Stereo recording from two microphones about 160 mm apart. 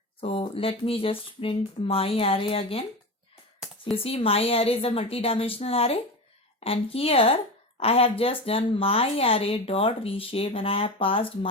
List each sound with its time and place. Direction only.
0.2 s speech: 35° left (ahead or behind)
3.9 s speech: 35° left (ahead or behind)